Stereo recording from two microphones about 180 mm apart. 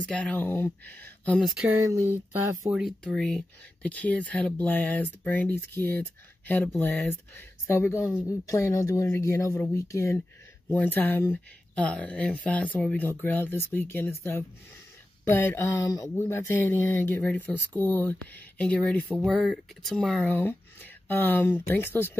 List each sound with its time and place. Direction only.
0.0 s speech: 5° left (ahead or behind)
2.6 s speech: centre (ahead or behind)
19.0 s speech: 5° right (ahead or behind); by 22.1 s 10° left (ahead or behind)